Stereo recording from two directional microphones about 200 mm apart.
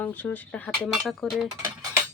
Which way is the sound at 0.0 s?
10° left (ahead or behind).